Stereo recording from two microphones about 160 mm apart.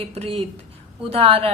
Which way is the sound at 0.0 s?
40° right (ahead or behind).